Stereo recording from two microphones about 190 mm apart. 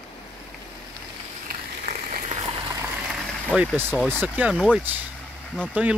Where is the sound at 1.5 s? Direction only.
45° right (ahead or behind).